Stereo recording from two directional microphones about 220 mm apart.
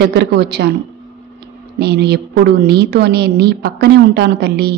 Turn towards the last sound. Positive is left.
turn(degrees=-45)  # may be behind; listen again after turning